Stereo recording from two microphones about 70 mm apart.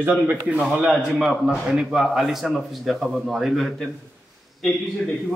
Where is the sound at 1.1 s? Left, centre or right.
Centre.